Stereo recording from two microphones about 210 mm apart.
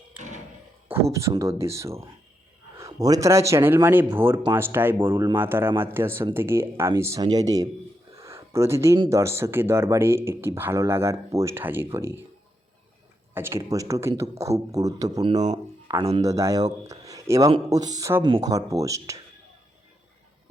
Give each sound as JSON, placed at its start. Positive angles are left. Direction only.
{"t": 1.1, "sound": "speech", "side_deg": -15}
{"t": 13.3, "sound": "speech", "side_deg": -10}